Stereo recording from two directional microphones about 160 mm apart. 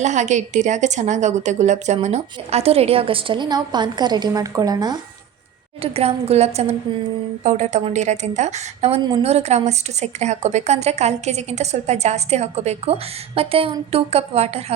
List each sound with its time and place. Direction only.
0.0 s a woman's voice: 45° right (ahead or behind); by 4.9 s 25° right (ahead or behind)
5.8 s a woman's voice: 40° right (ahead or behind)